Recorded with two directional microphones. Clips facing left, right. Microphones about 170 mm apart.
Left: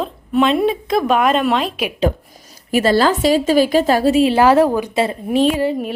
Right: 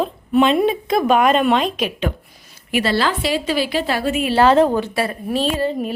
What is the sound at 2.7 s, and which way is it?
A woman's voice, 45° left (ahead or behind).